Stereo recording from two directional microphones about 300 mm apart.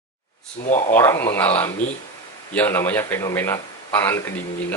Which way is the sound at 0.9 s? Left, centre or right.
Centre.